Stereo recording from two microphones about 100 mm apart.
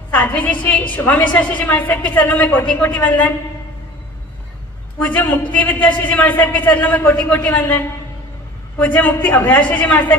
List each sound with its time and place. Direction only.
0.2 s a man's voice: 15° left (ahead or behind)
4.9 s a man's voice: 15° left (ahead or behind)